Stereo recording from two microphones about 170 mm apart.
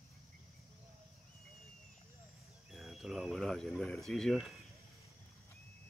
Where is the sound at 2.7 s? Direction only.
Centre (ahead or behind).